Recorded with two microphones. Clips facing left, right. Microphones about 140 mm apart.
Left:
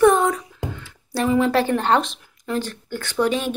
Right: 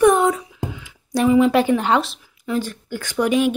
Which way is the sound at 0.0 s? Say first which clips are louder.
Right 1 dB; 15° right (ahead or behind).